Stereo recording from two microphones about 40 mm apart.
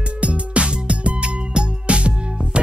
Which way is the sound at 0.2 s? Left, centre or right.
Right.